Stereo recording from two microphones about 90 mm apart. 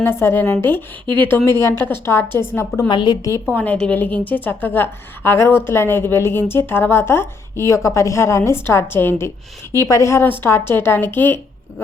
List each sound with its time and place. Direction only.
0.0 s a woman's voice: 25° left (ahead or behind)
1.5 s a woman's voice: 30° left (ahead or behind)
2.9 s a woman's voice: 55° left (ahead or behind)
3.6 s a woman's voice: 15° left (ahead or behind)